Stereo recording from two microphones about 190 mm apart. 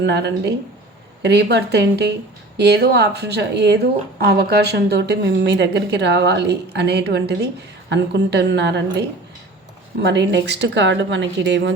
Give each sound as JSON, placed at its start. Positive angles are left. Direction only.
{"t": 0.0, "sound": "speech", "side_deg": -65}